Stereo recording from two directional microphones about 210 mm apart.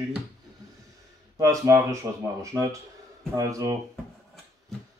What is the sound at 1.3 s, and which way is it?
Speech, 15° right (ahead or behind).